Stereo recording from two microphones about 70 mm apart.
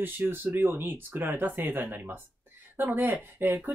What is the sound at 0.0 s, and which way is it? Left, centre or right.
Speech, right.